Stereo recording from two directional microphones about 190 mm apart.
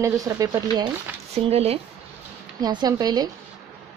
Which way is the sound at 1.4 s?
30° right (ahead or behind).